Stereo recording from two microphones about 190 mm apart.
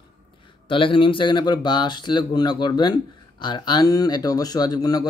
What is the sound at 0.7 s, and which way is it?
Speech, 25° left (ahead or behind).